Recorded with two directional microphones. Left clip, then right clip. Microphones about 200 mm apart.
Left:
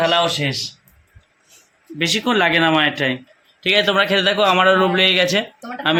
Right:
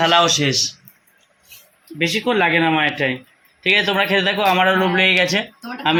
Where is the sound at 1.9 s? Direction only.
20° left (ahead or behind).